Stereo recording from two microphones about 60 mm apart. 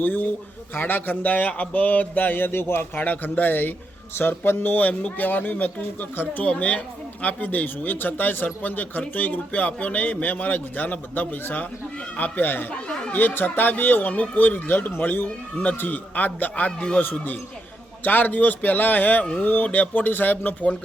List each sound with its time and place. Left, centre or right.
0.0 s a man's voice: left
3.0 s a man's voice: left
17.0 s a man's voice: left